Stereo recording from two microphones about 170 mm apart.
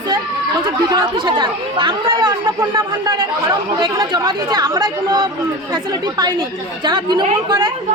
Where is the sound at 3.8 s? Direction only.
25° right (ahead or behind).